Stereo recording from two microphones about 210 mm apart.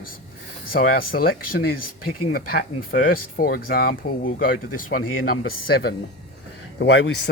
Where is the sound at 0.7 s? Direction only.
45° left (ahead or behind).